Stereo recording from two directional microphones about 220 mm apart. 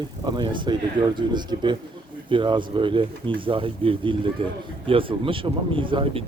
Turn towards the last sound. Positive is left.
turn(degrees=-25)  # may be behind; listen again after turning